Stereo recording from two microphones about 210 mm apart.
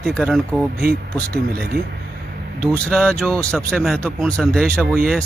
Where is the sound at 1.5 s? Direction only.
45° right (ahead or behind).